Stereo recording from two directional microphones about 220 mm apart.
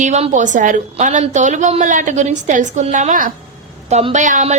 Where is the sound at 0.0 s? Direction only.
35° right (ahead or behind).